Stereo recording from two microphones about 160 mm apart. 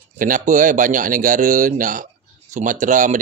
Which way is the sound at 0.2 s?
55° right (ahead or behind).